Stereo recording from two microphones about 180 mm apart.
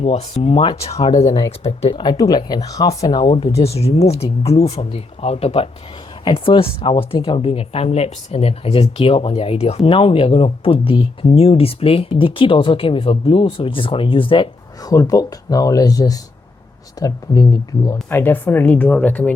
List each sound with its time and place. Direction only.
0.0 s speech: 35° left (ahead or behind); by 19.3 s 10° left (ahead or behind)